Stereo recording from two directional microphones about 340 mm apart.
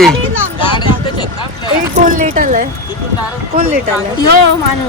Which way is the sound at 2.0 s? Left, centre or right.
Right.